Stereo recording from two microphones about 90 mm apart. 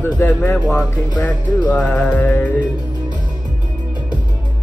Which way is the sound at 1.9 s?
20° left (ahead or behind).